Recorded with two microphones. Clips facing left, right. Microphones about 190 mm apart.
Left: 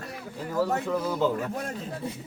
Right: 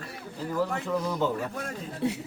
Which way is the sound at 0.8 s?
5° left (ahead or behind).